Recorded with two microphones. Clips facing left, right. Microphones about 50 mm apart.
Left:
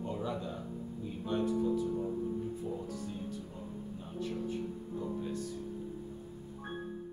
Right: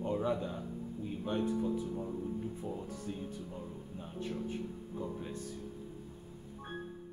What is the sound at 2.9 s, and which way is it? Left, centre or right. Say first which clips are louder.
Music: left 1 dB; right.